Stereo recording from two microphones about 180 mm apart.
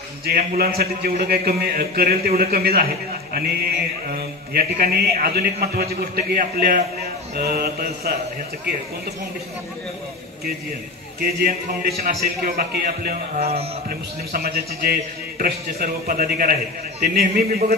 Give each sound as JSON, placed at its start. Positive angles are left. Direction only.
{"t": 0.2, "sound": "a man's voice", "side_deg": -60}
{"t": 11.1, "sound": "a man's voice", "side_deg": -55}